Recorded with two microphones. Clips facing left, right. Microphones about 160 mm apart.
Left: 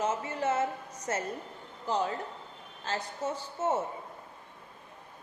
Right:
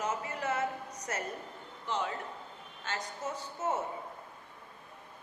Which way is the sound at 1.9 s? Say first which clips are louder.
Left 4 dB; 35° left (ahead or behind).